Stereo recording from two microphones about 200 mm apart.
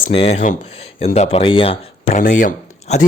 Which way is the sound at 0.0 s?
30° left (ahead or behind).